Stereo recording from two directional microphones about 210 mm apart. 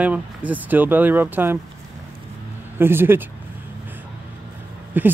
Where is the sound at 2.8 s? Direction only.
10° right (ahead or behind).